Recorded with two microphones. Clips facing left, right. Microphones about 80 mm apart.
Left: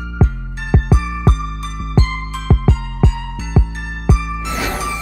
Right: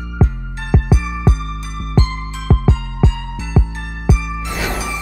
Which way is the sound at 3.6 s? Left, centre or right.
Centre.